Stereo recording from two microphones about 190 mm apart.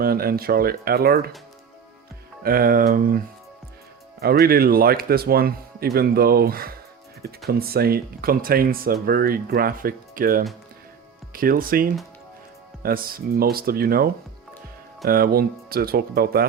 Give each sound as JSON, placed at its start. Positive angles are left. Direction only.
{"t": 0.0, "sound": "speech", "side_deg": -50}
{"t": 2.4, "sound": "speech", "side_deg": -50}
{"t": 4.2, "sound": "speech", "side_deg": -55}